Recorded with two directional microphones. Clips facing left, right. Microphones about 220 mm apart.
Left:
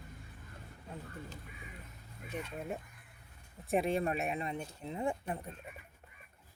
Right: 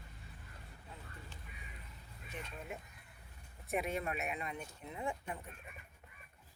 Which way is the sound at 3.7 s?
30° left (ahead or behind).